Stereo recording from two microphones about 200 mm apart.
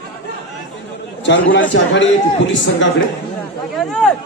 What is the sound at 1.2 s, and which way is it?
A man's voice, 65° left (ahead or behind).